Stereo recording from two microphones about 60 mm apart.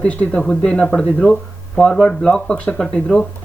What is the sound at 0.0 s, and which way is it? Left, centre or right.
Speech, left.